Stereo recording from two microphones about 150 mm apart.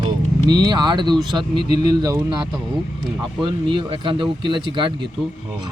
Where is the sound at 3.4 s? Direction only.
30° right (ahead or behind).